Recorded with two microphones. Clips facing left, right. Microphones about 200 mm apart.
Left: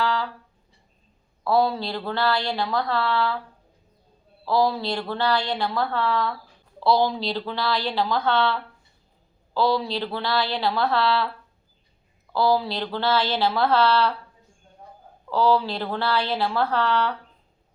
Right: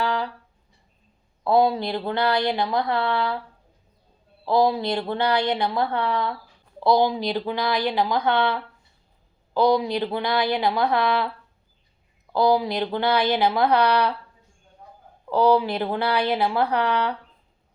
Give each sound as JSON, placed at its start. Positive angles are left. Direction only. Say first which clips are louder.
{"t": 0.0, "sound": "music", "louder": "even", "side_deg": -20}
{"t": 1.5, "sound": "a woman's voice", "louder": "right 2 dB", "side_deg": -20}
{"t": 4.4, "sound": "a woman's voice", "louder": "right 2 dB", "side_deg": -20}
{"t": 12.3, "sound": "a woman's voice", "louder": "right 2 dB", "side_deg": -20}
{"t": 15.3, "sound": "a woman's voice", "louder": "right 2 dB", "side_deg": -20}